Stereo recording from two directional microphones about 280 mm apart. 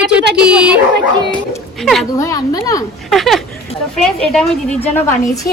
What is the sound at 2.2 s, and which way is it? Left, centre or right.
Speech, centre.